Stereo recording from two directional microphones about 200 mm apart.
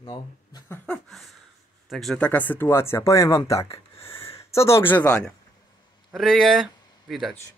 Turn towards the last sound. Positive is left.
turn(degrees=0)  # may be behind; listen again after turning